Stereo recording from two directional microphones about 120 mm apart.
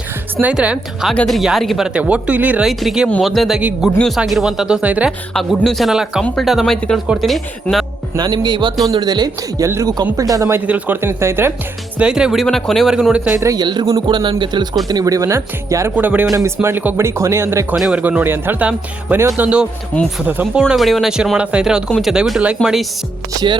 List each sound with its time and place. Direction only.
0.4 s speech: 10° right (ahead or behind)
1.0 s speech: 5° left (ahead or behind)
3.9 s speech: 5° left (ahead or behind); by 5.1 s 10° right (ahead or behind)
5.3 s speech: centre (ahead or behind)
8.1 s speech: 35° right (ahead or behind)
9.6 s speech: 25° right (ahead or behind)
10.7 s speech: 15° right (ahead or behind)
11.9 s speech: 10° right (ahead or behind)
13.4 s speech: 30° right (ahead or behind)
17.7 s speech: 5° right (ahead or behind)
18.0 s speech: 15° right (ahead or behind)
21.8 s speech: 5° left (ahead or behind)
22.1 s speech: 5° right (ahead or behind)